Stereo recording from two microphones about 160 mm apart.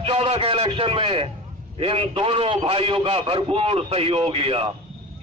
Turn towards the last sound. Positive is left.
turn(degrees=-35)  # may be behind; listen again after turning